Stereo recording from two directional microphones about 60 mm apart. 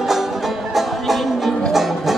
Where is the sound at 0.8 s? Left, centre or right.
Centre.